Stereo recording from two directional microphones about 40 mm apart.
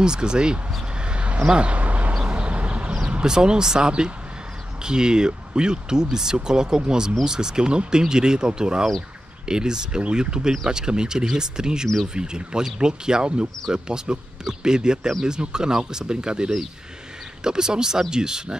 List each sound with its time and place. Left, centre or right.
0.0 s speech: right
1.0 s a sound: right
4.8 s speech: centre